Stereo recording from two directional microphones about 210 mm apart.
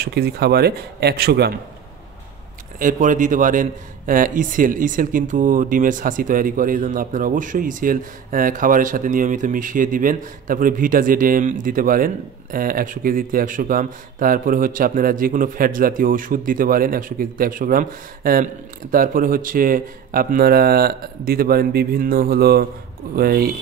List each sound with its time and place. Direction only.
0.0 s speech: 50° right (ahead or behind)
2.8 s a man's voice: 40° right (ahead or behind)